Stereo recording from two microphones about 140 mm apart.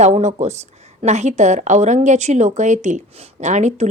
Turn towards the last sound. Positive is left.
turn(degrees=-55)  # may be behind; listen again after turning